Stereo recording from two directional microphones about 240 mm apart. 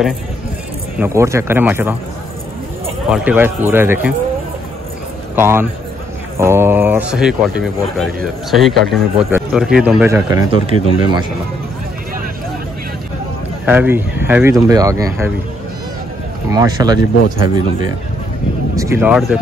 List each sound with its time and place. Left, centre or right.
0.9 s speech: centre
3.1 s speech: centre
5.3 s a man's voice: centre
13.7 s speech: centre
16.4 s speech: centre